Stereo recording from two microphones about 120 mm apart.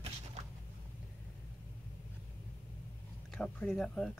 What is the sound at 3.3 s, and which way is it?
Speech, 5° left (ahead or behind).